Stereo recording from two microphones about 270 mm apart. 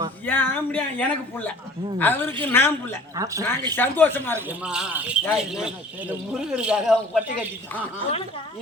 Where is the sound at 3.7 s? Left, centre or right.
Centre.